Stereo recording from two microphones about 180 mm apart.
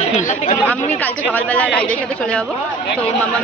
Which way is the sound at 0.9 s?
10° left (ahead or behind).